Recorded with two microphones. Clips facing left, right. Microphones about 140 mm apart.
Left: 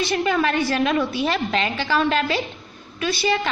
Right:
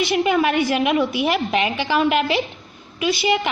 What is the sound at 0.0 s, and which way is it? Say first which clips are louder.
A woman's voice: right 3 dB; 15° right (ahead or behind).